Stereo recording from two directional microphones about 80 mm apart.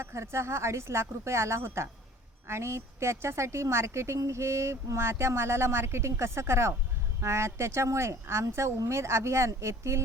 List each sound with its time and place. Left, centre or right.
0.0 s a woman's voice: right